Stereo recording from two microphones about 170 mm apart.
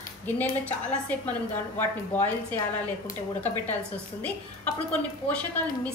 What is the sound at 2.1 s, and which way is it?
Speech, 10° left (ahead or behind).